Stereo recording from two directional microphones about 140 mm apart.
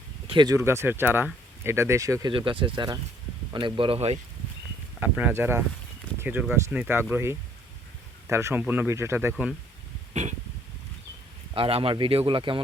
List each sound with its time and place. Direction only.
0.3 s speech: 35° right (ahead or behind)
0.5 s speech: 20° right (ahead or behind)
2.3 s speech: 40° right (ahead or behind)
4.9 s speech: 10° right (ahead or behind)
9.3 s speech: centre (ahead or behind)
11.5 s speech: 40° right (ahead or behind)